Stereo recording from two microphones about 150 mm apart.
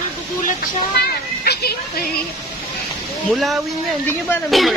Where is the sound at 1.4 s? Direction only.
90° left.